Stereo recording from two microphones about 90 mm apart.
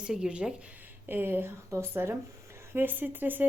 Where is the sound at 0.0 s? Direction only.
10° right (ahead or behind).